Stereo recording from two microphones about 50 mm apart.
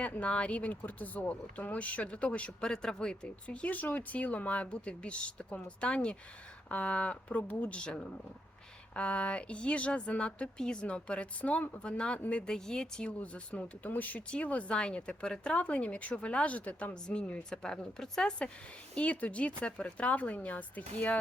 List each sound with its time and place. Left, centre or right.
0.0 s speech: left
7.7 s speech: centre
9.0 s speech: left
11.8 s a woman's voice: centre
13.8 s speech: left
17.5 s a woman's voice: centre; by 21.2 s left